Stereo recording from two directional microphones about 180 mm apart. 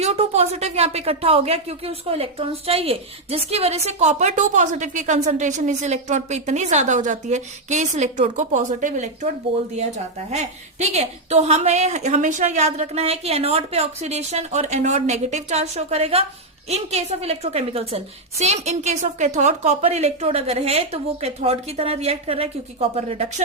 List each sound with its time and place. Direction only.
0.0 s a woman's voice: 35° right (ahead or behind)
10.3 s a woman's voice: 35° right (ahead or behind)